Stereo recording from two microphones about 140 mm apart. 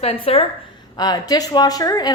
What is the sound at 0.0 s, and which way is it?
Speech, 45° left (ahead or behind).